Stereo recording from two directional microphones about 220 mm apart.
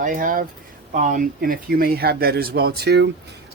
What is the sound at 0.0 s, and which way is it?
Speech, 40° right (ahead or behind).